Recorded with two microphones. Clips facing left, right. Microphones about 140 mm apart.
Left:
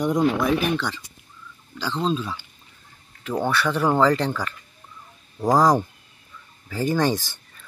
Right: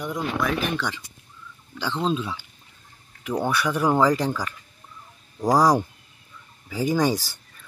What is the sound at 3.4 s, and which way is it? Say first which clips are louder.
Speech: left 1 dB; 10° right (ahead or behind).